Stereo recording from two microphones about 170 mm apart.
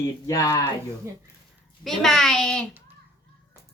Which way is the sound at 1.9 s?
5° left (ahead or behind).